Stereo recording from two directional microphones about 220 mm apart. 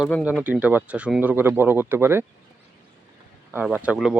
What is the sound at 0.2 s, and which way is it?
Speech, 5° right (ahead or behind).